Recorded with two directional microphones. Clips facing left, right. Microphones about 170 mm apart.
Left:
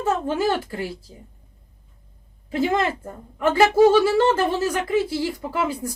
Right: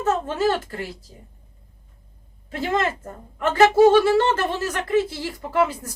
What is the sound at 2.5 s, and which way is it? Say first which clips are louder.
Speech: left 2 dB; 10° left (ahead or behind).